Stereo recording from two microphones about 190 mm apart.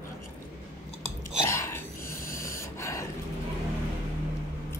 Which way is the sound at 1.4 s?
15° left (ahead or behind).